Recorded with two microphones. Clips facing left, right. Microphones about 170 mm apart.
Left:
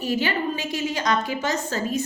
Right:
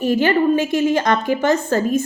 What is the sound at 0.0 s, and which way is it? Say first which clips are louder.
A woman's voice: right 9 dB; 50° right (ahead or behind).